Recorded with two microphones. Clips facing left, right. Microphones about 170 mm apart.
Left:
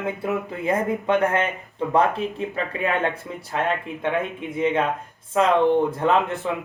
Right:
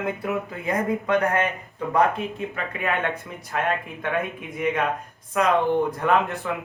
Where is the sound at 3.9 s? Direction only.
20° left (ahead or behind).